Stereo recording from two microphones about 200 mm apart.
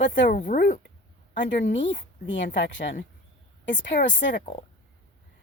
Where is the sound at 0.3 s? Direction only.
45° left (ahead or behind).